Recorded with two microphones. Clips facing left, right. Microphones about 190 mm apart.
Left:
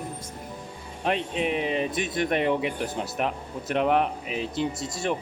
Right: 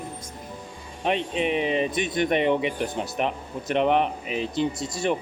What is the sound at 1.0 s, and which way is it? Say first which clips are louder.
Speech: right 2 dB; centre (ahead or behind).